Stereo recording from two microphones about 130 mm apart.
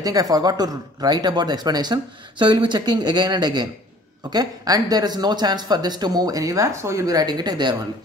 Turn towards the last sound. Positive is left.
turn(degrees=-35)  # may be behind; listen again after turning